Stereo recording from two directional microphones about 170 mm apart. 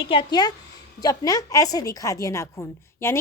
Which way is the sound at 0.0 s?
30° left (ahead or behind).